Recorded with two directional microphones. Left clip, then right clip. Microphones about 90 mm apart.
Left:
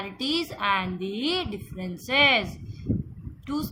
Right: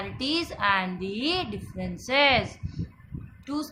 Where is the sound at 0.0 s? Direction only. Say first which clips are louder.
Left 1 dB; 40° left (ahead or behind).